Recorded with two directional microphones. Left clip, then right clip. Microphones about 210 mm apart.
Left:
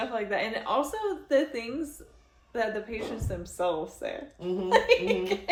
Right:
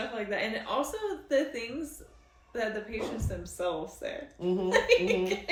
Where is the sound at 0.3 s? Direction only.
20° left (ahead or behind).